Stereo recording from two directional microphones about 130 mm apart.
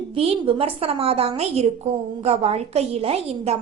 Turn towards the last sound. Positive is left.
turn(degrees=-50)  # may be behind; listen again after turning